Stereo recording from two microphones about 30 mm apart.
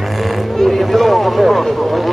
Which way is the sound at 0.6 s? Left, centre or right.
Centre.